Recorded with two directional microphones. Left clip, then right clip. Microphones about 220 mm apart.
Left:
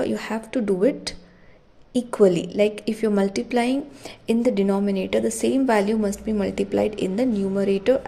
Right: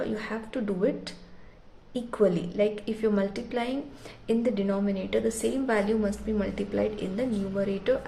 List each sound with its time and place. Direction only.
0.0 s a woman's voice: 35° left (ahead or behind)